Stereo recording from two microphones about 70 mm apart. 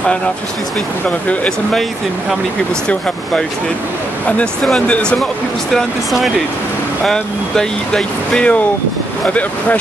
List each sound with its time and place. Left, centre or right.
1.0 s speech: centre
4.6 s speech: centre
5.7 s speech: centre